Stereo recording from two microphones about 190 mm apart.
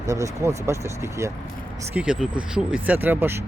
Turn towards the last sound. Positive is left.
turn(degrees=-10)  # may be behind; listen again after turning